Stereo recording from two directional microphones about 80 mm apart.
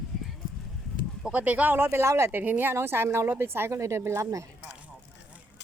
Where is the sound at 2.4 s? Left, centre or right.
Right.